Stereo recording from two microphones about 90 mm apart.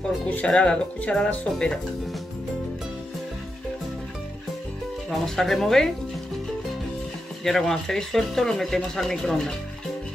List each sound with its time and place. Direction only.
0.5 s speech: 10° left (ahead or behind)
5.1 s speech: 5° left (ahead or behind)
7.4 s speech: 5° left (ahead or behind)